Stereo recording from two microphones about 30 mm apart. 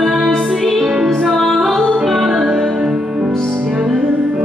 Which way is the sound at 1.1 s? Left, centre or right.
Centre.